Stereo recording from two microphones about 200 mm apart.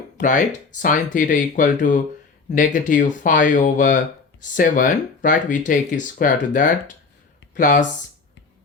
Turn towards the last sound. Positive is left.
turn(degrees=40)  # may be behind; listen again after turning